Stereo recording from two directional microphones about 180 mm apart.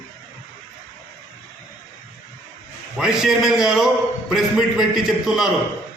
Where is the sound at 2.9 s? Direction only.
5° right (ahead or behind).